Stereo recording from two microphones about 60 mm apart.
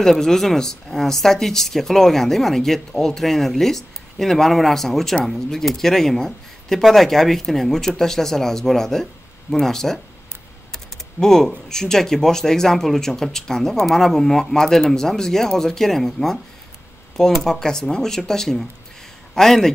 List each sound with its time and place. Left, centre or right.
0.0 s speech: centre
10.7 s typing: centre
11.7 s speech: centre